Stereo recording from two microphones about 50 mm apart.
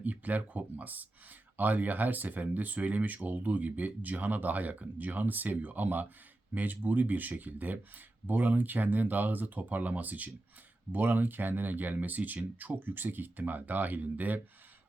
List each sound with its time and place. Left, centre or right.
0.0 s speech: right